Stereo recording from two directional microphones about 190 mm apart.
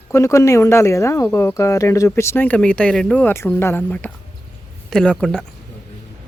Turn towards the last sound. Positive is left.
turn(degrees=5)  # may be behind; listen again after turning